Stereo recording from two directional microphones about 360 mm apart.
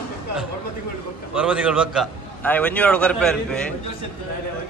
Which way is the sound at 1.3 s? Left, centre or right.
Centre.